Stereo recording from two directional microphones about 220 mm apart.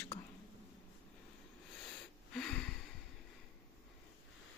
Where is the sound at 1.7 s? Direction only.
5° left (ahead or behind).